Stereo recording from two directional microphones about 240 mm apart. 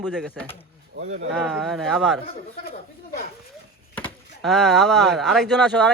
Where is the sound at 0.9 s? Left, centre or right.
Right.